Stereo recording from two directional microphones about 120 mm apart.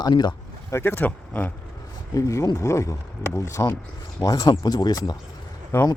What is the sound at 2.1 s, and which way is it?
Speech, 25° left (ahead or behind).